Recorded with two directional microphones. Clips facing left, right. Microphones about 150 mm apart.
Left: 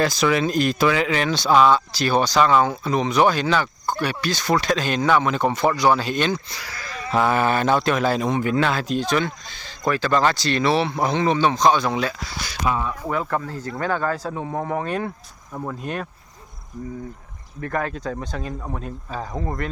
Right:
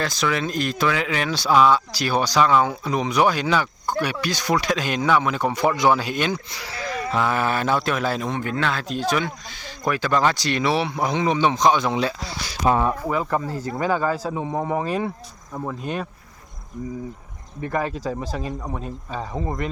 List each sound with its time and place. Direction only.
0.0 s speech: 5° left (ahead or behind); by 6.9 s 25° right (ahead or behind)
7.3 s speech: centre (ahead or behind); by 12.7 s 30° right (ahead or behind)
13.1 s speech: 5° right (ahead or behind)
17.7 s speech: 5° right (ahead or behind)